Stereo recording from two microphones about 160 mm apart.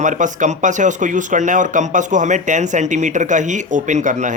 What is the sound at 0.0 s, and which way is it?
Speech, 50° right (ahead or behind).